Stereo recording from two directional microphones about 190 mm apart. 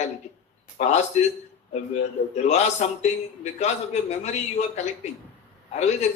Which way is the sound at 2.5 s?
35° left (ahead or behind).